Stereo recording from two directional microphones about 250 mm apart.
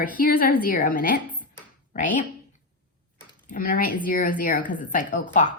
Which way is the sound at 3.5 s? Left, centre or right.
Left.